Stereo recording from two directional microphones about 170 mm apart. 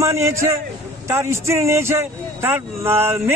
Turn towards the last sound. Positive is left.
turn(degrees=-15)  # may be behind; listen again after turning